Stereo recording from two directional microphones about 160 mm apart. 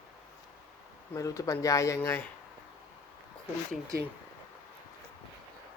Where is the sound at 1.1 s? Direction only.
20° left (ahead or behind).